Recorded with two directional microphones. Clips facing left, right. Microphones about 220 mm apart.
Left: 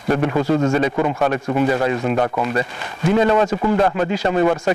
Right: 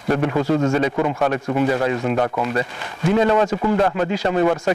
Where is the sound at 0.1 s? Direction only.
30° left (ahead or behind).